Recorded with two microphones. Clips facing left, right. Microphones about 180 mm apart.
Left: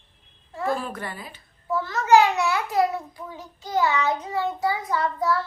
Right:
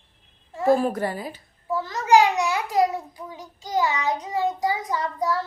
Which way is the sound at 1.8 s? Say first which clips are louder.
Even; 15° right (ahead or behind).